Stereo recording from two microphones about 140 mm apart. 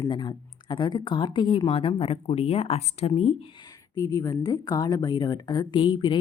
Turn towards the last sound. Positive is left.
turn(degrees=35)  # may be behind; listen again after turning